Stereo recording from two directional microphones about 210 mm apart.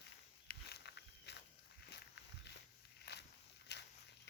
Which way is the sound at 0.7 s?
55° left (ahead or behind).